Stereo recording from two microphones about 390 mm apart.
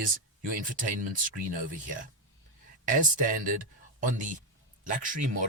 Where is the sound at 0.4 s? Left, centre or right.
Right.